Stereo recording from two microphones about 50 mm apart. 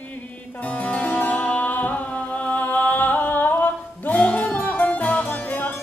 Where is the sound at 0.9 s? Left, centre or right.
Left.